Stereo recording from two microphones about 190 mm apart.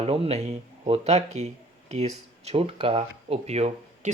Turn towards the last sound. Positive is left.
turn(degrees=-35)  # may be behind; listen again after turning